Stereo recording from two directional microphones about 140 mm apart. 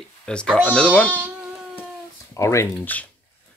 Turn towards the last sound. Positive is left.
turn(degrees=10)  # may be behind; listen again after turning